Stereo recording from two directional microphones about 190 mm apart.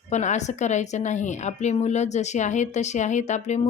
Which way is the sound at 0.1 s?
40° left (ahead or behind).